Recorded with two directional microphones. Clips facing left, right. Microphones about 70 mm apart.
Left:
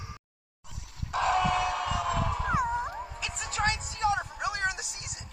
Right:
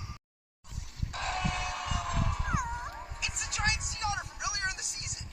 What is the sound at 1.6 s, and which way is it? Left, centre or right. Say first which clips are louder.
Wail: left 6 dB; left.